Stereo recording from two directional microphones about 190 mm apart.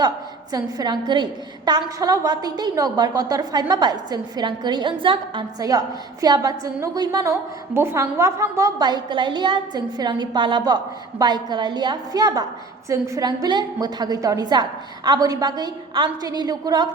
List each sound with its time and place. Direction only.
0.5 s a woman's voice: 20° right (ahead or behind)